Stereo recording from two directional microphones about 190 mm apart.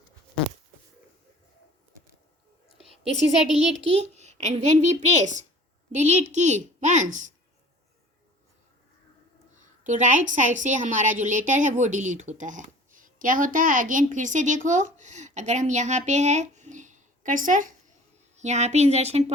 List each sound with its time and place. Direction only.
2.7 s a sound: 30° right (ahead or behind)
3.5 s a woman's voice: 35° right (ahead or behind)
9.8 s a woman's voice: 40° right (ahead or behind)